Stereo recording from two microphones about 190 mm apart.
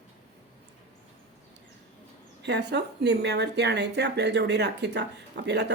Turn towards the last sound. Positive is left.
turn(degrees=-65)  # may be behind; listen again after turning